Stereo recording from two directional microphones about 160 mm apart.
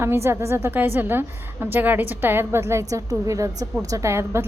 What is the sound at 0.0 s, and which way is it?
A woman's voice, 15° right (ahead or behind).